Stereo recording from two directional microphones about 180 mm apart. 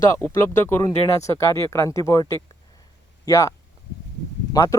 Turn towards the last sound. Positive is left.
turn(degrees=15)  # may be behind; listen again after turning